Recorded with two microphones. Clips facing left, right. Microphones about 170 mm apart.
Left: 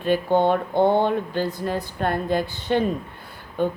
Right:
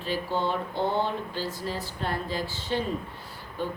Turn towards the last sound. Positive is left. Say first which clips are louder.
# left 8 dB
turn(degrees=55)  # may be behind; listen again after turning